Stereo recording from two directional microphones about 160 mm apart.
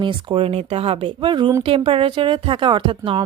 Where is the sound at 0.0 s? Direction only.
30° right (ahead or behind).